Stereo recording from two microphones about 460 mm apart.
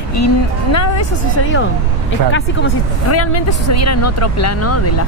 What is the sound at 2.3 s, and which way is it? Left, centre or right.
Speech, left.